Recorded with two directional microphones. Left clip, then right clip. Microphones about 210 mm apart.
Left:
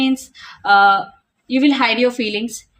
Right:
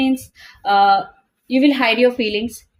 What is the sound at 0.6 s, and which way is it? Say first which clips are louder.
Speech: left 2 dB; 25° left (ahead or behind).